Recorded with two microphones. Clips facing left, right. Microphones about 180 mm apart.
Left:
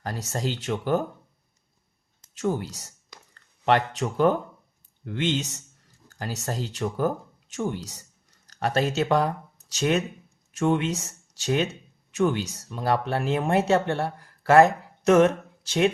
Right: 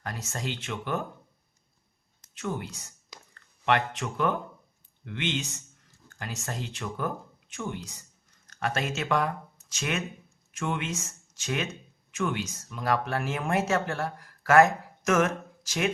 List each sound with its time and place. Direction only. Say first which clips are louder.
0.0 s speech: left 5 dB; 35° left (ahead or behind)
2.3 s speech: left 7 dB; 35° left (ahead or behind)
3.7 s speech: left 4 dB; 35° left (ahead or behind)
6.1 s a sound: left 6 dB; 35° left (ahead or behind)
6.4 s speech: left 7 dB; 35° left (ahead or behind)